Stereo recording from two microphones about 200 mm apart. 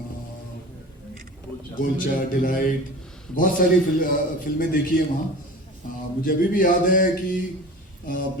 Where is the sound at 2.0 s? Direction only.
45° left (ahead or behind).